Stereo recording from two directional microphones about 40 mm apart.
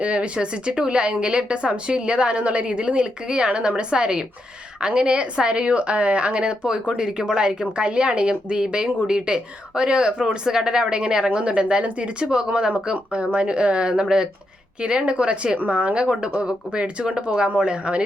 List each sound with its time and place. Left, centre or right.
0.0 s speech: right